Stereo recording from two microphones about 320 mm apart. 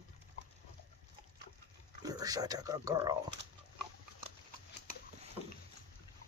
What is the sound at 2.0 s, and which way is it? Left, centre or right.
Speech, centre.